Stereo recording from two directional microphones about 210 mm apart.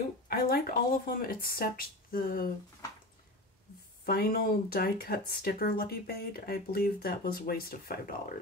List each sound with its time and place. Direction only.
0.3 s speech: 45° left (ahead or behind)
4.0 s speech: 45° left (ahead or behind)